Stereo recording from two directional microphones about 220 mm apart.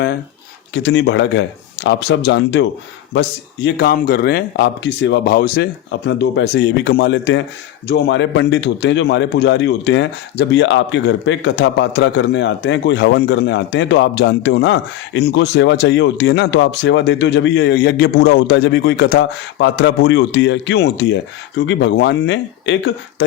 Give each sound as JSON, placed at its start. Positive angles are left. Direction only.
{"t": 0.7, "sound": "a man's voice", "side_deg": 50}